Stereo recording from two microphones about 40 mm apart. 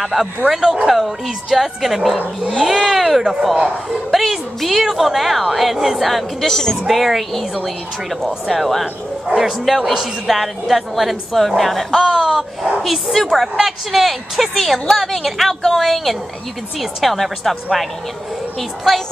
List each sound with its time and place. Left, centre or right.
0.0 s a woman's voice: centre
3.5 s speech: centre
4.1 s a woman's voice: centre
8.5 s a woman's voice: centre
18.9 s a woman's voice: centre